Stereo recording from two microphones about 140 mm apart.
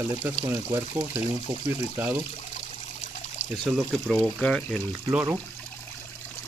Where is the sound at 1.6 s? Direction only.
15° right (ahead or behind).